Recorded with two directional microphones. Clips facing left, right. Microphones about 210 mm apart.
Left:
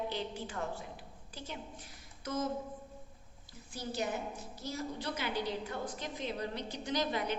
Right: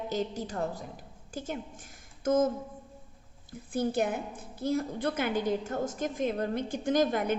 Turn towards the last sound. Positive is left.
turn(degrees=-50)  # may be behind; listen again after turning